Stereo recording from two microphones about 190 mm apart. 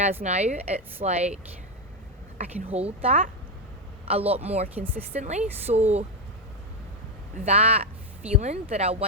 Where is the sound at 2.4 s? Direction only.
35° right (ahead or behind).